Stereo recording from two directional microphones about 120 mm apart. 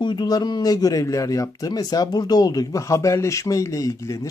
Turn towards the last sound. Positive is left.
turn(degrees=25)  # may be behind; listen again after turning